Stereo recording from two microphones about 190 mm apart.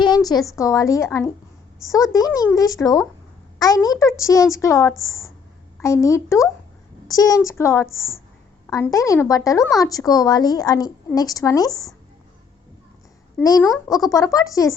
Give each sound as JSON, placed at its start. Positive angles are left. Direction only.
{"t": 0.0, "sound": "a woman's voice", "side_deg": 20}
{"t": 13.4, "sound": "speech", "side_deg": 20}